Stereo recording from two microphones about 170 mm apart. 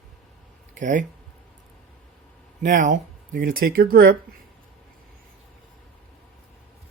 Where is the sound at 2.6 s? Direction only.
50° right (ahead or behind); by 4.1 s 65° right (ahead or behind).